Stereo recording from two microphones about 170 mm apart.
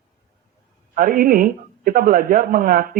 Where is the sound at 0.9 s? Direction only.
55° right (ahead or behind).